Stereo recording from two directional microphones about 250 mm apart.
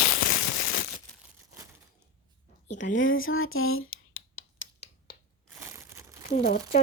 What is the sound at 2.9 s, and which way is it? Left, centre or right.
Scratch, left.